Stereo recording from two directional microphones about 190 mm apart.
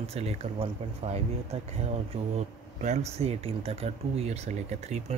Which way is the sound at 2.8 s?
35° right (ahead or behind).